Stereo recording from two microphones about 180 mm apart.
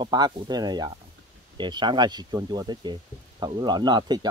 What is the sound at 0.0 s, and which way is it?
Speech, 25° right (ahead or behind).